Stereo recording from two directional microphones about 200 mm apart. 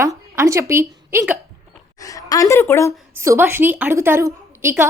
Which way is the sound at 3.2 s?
10° right (ahead or behind).